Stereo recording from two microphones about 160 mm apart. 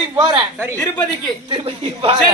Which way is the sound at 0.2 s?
35° right (ahead or behind).